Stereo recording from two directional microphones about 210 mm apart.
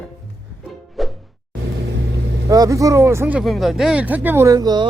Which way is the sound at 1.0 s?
Centre (ahead or behind).